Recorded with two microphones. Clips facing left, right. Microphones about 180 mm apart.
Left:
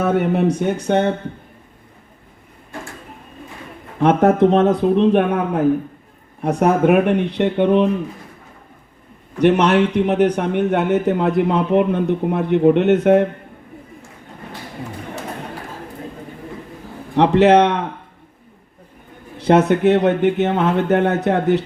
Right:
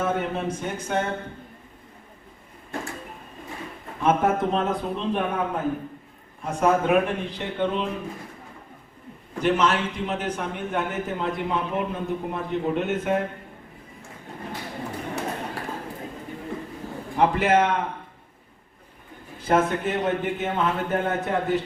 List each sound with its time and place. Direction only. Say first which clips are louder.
0.0 s a man's voice: left 9 dB; 70° left (ahead or behind)
4.0 s a man's voice: left 8 dB; 70° left (ahead or behind)
9.4 s a man's voice: left 8 dB; 65° left (ahead or behind)
17.2 s a man's voice: left 8 dB; 75° left (ahead or behind)
19.4 s a man's voice: left 8 dB; 75° left (ahead or behind)